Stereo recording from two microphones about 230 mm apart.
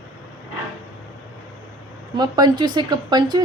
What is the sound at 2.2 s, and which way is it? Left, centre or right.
A woman's voice, centre.